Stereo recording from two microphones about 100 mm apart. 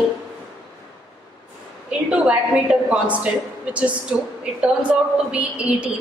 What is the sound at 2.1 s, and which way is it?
A woman's voice, 10° right (ahead or behind).